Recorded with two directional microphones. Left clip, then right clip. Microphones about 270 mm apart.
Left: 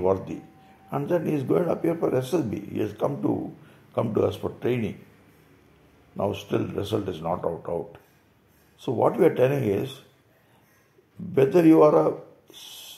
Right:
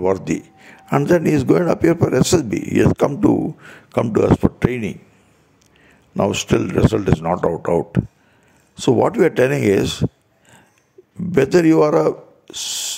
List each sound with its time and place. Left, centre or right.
0.8 s a man's voice: right
6.1 s a man's voice: right
11.3 s a man's voice: right